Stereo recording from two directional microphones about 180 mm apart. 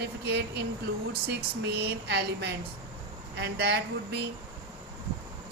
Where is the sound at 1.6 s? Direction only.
65° right (ahead or behind).